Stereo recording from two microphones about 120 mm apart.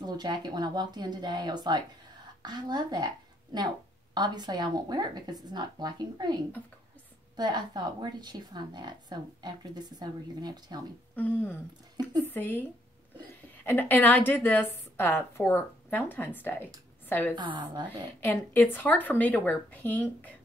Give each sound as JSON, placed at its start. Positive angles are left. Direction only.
{"t": 0.0, "sound": "a woman's voice", "side_deg": -35}
{"t": 7.3, "sound": "a woman's voice", "side_deg": -35}
{"t": 11.1, "sound": "a woman's voice", "side_deg": 15}
{"t": 13.7, "sound": "a woman's voice", "side_deg": 15}